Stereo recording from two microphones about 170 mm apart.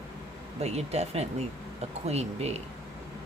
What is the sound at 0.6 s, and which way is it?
Speech, 40° right (ahead or behind).